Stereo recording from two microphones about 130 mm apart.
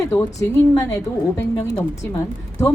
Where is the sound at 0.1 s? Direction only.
25° left (ahead or behind).